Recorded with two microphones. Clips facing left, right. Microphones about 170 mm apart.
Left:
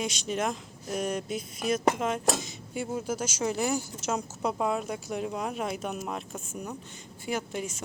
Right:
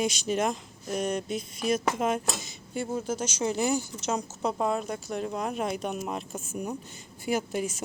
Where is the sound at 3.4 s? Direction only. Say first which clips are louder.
Right 2 dB; centre (ahead or behind).